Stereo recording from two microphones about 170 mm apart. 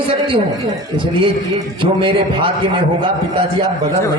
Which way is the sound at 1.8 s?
30° right (ahead or behind).